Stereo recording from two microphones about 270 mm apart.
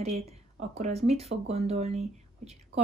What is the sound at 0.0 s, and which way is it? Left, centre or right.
Speech, right.